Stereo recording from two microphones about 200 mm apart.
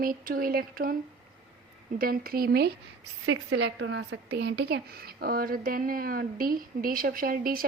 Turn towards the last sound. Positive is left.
turn(degrees=-45)  # may be behind; listen again after turning